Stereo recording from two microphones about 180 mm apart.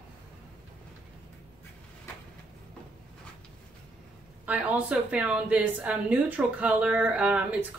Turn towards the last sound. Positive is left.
turn(degrees=-5)  # may be behind; listen again after turning